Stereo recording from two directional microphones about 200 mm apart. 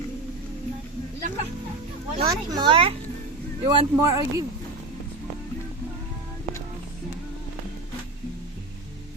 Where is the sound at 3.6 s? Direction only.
15° right (ahead or behind).